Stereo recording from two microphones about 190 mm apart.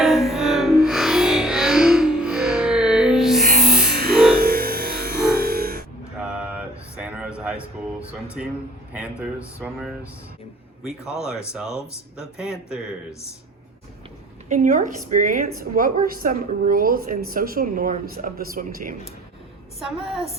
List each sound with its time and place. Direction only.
0.0 s music: centre (ahead or behind)
4.4 s music: 50° right (ahead or behind)
6.1 s a sound: 5° right (ahead or behind)
9.0 s speech: 5° right (ahead or behind)
14.5 s a woman's voice: 40° right (ahead or behind)
19.8 s speech: 5° right (ahead or behind)